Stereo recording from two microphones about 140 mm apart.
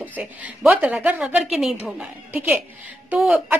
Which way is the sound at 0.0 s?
10° right (ahead or behind).